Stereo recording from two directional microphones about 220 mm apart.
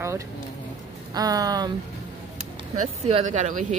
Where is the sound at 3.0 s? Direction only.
30° right (ahead or behind).